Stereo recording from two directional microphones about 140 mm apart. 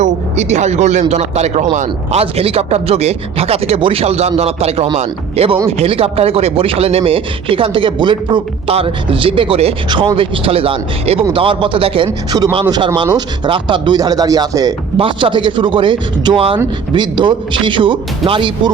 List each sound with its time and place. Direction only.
0.0 s speech: 55° right (ahead or behind)
2.2 s speech: 45° right (ahead or behind); by 14.8 s 25° right (ahead or behind)
14.9 s speech: 35° right (ahead or behind)